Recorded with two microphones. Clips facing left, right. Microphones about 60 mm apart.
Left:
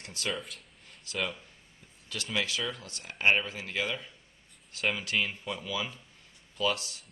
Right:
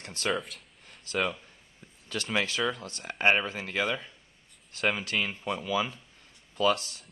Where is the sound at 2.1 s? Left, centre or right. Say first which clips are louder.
Right 3 dB; right.